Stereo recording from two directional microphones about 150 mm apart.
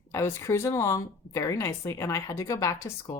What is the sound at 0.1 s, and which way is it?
A woman's voice, 20° left (ahead or behind).